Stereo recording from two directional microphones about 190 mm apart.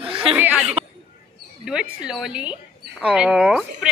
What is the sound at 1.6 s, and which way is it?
Speech, 5° right (ahead or behind).